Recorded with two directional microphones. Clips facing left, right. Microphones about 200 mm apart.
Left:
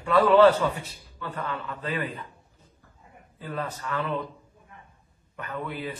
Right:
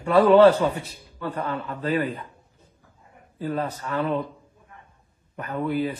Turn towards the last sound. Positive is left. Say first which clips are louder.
# right 8 dB
turn(degrees=-35)  # may be behind; listen again after turning